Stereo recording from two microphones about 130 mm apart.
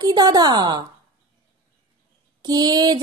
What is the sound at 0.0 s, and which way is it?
Speech, 35° right (ahead or behind).